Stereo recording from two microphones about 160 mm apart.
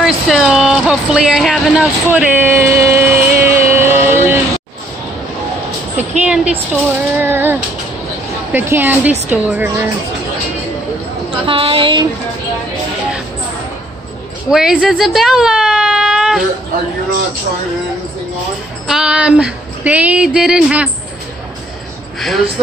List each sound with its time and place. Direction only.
0.0 s speech: centre (ahead or behind)
2.0 s speech: 10° right (ahead or behind)
3.6 s a sound: 15° right (ahead or behind)
3.9 s vehicle: 55° right (ahead or behind)
5.9 s speech: 10° right (ahead or behind)
11.4 s a woman's voice: 35° right (ahead or behind)
14.5 s speech: 5° right (ahead or behind)
18.9 s speech: 5° right (ahead or behind)
22.2 s speech: centre (ahead or behind)